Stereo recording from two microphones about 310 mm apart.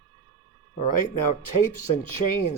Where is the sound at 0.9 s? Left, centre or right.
Left.